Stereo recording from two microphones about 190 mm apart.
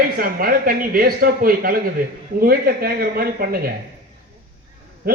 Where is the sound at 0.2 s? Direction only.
50° right (ahead or behind).